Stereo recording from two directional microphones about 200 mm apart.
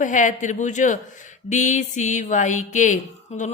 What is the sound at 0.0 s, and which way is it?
Speech, 40° left (ahead or behind).